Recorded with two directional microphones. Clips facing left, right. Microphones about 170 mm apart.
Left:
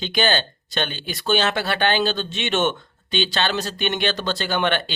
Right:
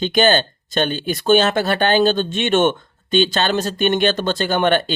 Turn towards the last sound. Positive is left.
turn(degrees=-45)  # may be behind; listen again after turning